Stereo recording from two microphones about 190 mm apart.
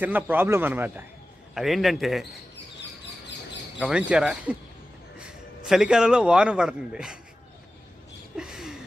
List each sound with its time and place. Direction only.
0.0 s a man's voice: 10° right (ahead or behind)
3.8 s a man's voice: 5° right (ahead or behind)
5.6 s a man's voice: 5° right (ahead or behind)
8.4 s a sound: 5° right (ahead or behind)